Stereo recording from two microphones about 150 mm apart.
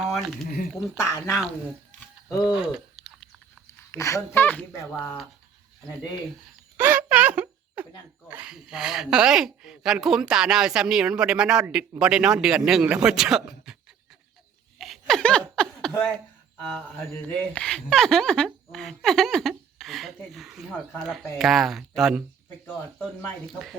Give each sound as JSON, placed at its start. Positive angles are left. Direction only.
{"t": 0.0, "sound": "a sound", "side_deg": 0}
{"t": 0.7, "sound": "speech", "side_deg": -5}
{"t": 1.0, "sound": "speech", "side_deg": 20}
{"t": 2.5, "sound": "chewing", "side_deg": -5}
{"t": 3.8, "sound": "speech", "side_deg": 20}
{"t": 6.7, "sound": "a sound", "side_deg": -15}
{"t": 8.3, "sound": "speech", "side_deg": -5}
{"t": 14.8, "sound": "laughter", "side_deg": 0}
{"t": 17.5, "sound": "speech", "side_deg": 5}